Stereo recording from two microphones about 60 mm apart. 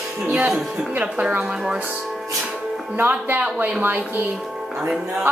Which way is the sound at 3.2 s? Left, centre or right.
Right.